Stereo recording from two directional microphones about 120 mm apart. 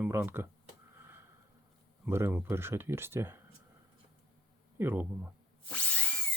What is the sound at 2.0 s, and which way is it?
Speech, 20° right (ahead or behind).